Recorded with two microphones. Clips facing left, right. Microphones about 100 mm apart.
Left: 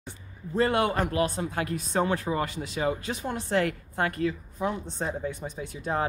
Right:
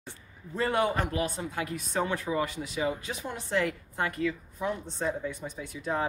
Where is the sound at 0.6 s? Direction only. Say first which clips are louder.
Left 3 dB; 70° left (ahead or behind).